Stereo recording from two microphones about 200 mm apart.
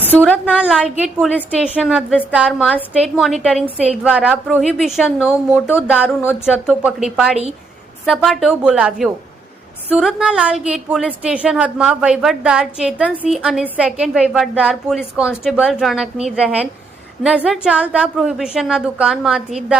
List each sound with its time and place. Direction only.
0.5 s a woman's voice: 5° right (ahead or behind)
5.5 s a sound: 10° left (ahead or behind)
5.9 s a woman's voice: 5° right (ahead or behind)